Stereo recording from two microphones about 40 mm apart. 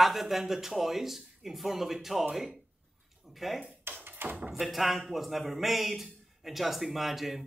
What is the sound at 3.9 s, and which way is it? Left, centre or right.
Tap, right.